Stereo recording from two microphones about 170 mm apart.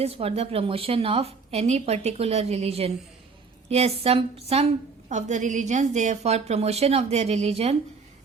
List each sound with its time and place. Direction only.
0.0 s a woman's voice: 35° right (ahead or behind)